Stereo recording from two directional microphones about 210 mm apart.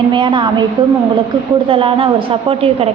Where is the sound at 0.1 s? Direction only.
20° right (ahead or behind).